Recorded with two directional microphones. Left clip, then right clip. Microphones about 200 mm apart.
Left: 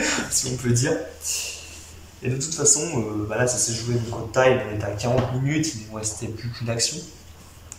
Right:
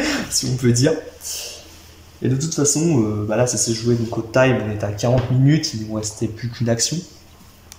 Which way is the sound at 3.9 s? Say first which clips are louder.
Right 8 dB; 40° right (ahead or behind).